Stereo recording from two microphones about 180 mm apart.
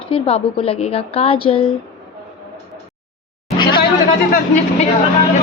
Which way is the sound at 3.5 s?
25° left (ahead or behind).